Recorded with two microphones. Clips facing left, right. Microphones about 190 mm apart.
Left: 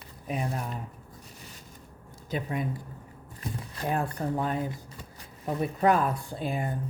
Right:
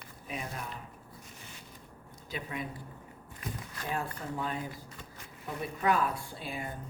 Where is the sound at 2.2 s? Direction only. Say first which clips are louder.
Left 7 dB; 45° left (ahead or behind).